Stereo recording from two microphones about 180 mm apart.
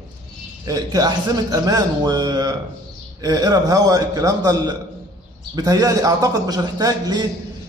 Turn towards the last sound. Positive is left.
turn(degrees=-20)  # may be behind; listen again after turning